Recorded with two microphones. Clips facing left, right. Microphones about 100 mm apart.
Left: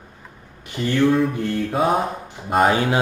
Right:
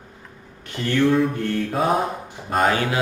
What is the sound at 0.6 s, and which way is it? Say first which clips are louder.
Speech: left 1 dB; 15° left (ahead or behind).